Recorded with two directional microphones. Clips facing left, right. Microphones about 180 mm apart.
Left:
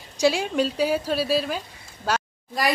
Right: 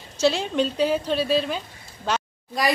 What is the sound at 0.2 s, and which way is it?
A woman's voice, 10° left (ahead or behind).